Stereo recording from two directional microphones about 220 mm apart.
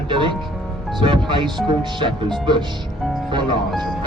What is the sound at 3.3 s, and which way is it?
Music, 20° right (ahead or behind).